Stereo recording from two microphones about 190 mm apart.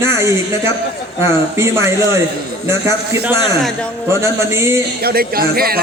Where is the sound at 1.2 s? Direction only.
15° right (ahead or behind).